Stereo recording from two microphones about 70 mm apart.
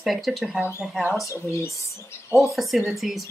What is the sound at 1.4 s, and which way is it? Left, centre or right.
Speech, left.